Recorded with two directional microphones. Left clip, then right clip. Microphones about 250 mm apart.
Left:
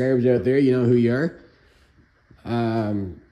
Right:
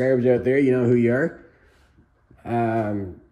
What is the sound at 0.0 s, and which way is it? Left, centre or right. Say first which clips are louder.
Speech: right 1 dB; centre.